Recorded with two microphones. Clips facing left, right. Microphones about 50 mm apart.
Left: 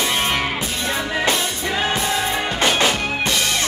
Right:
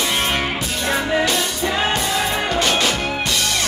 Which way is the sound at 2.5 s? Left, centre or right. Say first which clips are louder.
Left 2 dB; left.